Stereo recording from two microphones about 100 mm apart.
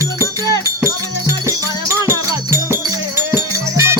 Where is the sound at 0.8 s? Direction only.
25° right (ahead or behind).